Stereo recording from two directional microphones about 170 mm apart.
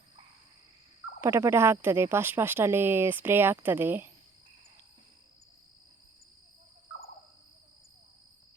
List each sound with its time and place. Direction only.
1.2 s speech: 15° right (ahead or behind)